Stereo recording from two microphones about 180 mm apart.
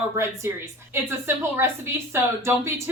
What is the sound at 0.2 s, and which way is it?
A woman's voice, 15° right (ahead or behind).